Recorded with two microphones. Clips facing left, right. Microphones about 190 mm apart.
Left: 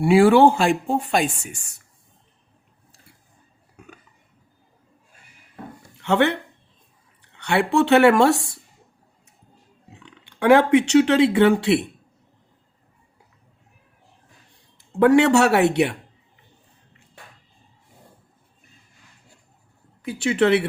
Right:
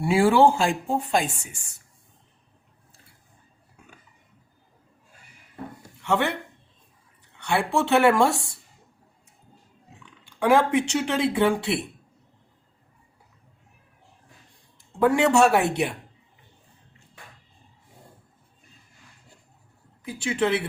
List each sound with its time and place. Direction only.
0.0 s speech: 70° left (ahead or behind)
6.0 s speech: 70° left (ahead or behind)
10.0 s speech: 65° left (ahead or behind)
14.9 s speech: 70° left (ahead or behind)
20.0 s speech: 70° left (ahead or behind)